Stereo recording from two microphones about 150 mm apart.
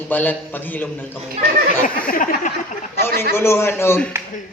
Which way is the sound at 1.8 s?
65° left (ahead or behind).